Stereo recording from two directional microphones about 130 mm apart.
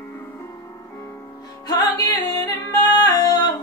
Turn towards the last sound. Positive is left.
turn(degrees=30)  # may be behind; listen again after turning